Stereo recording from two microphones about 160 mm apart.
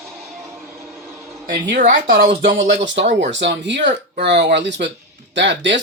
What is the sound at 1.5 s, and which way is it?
Speech, 55° right (ahead or behind).